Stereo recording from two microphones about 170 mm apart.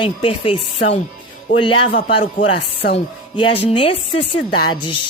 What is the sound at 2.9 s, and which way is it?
Speech, 30° left (ahead or behind).